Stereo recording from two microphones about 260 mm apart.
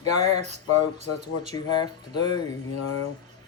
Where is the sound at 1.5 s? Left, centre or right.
Centre.